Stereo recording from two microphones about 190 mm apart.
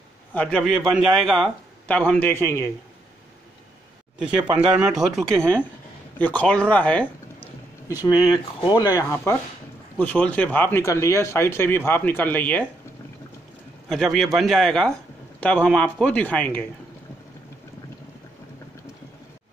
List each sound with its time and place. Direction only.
0.3 s a man's voice: 5° left (ahead or behind)
4.2 s a man's voice: 5° right (ahead or behind)
7.9 s speech: 20° left (ahead or behind)
13.8 s a man's voice: centre (ahead or behind)